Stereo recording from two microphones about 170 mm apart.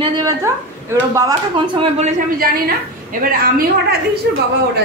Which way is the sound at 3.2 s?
60° right (ahead or behind).